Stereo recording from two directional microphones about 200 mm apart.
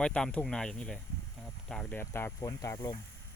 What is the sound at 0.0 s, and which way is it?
Speech, 5° left (ahead or behind).